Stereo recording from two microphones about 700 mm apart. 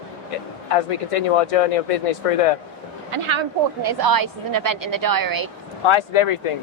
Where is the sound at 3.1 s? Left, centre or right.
Right.